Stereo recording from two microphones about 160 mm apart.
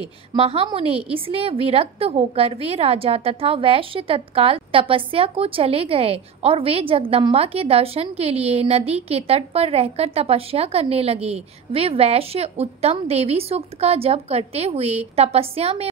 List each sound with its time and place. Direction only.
0.3 s a woman's voice: 35° right (ahead or behind)